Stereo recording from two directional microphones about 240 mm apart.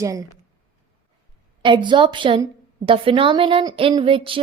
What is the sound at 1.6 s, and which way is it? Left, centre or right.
A woman's voice, centre.